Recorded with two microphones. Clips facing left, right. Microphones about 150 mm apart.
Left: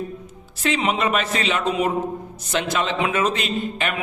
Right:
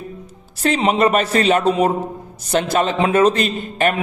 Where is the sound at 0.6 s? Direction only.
40° right (ahead or behind).